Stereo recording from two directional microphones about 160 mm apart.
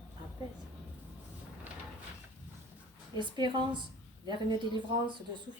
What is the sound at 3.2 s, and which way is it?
A woman's voice, 30° right (ahead or behind).